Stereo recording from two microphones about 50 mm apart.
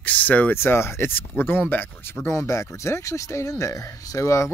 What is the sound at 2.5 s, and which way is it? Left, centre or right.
Speech, left.